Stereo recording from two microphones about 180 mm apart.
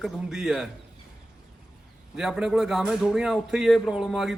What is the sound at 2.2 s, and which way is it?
A man's voice, 5° right (ahead or behind).